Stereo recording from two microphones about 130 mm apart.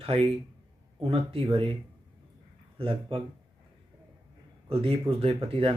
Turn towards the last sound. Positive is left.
turn(degrees=-45)  # may be behind; listen again after turning